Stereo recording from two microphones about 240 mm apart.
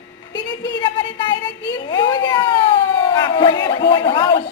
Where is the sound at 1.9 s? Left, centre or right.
Centre.